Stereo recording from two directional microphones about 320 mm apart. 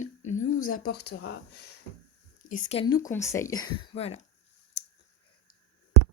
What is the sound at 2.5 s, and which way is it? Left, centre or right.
Speech, centre.